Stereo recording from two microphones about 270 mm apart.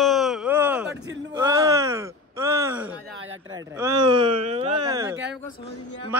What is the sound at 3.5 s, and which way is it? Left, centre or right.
A man's voice, centre.